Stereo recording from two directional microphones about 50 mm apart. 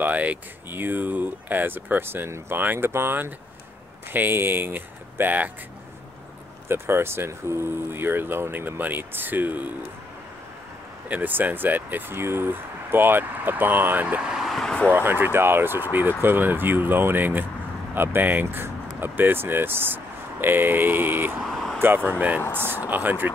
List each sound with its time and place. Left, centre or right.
0.0 s speech: right
0.7 s speech: right
2.6 s speech: right
2.9 s speech: right
6.7 s speech: right
11.1 s speech: right
14.4 s vehicle: centre
14.9 s speech: right